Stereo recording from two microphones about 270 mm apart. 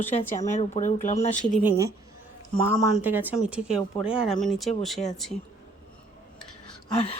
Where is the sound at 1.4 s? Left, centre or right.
Centre.